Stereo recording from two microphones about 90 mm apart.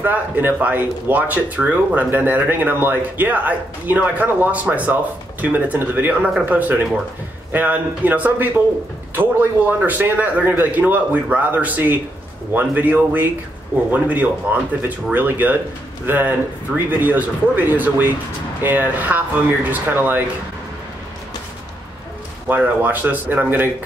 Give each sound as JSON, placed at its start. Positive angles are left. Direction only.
{"t": 0.0, "sound": "speech", "side_deg": -20}
{"t": 22.5, "sound": "speech", "side_deg": -20}